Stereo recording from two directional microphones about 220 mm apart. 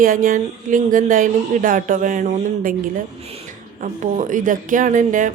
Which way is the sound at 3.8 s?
35° right (ahead or behind).